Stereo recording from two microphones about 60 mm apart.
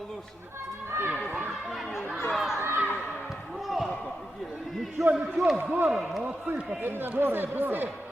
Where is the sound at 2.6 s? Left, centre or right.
Right.